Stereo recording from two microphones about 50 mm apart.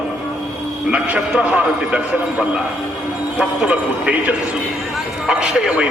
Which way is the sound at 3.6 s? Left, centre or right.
Right.